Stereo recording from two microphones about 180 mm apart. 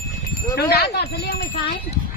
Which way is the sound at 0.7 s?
65° left (ahead or behind).